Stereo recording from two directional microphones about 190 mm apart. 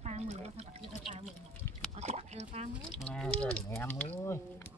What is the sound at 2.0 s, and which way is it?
Oink, 35° right (ahead or behind).